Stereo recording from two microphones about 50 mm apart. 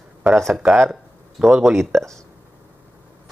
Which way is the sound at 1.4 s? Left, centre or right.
Centre.